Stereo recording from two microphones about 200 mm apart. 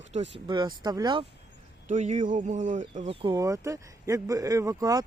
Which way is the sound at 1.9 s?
35° right (ahead or behind).